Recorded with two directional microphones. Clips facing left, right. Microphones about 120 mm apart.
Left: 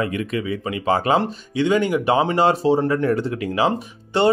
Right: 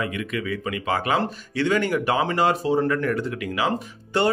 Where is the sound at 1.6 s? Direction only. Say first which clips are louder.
Left 3 dB; 15° left (ahead or behind).